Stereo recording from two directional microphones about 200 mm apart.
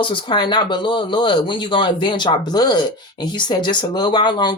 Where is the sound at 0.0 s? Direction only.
25° left (ahead or behind).